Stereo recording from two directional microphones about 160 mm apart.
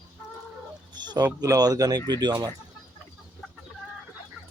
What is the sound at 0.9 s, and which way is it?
Speech, 25° right (ahead or behind).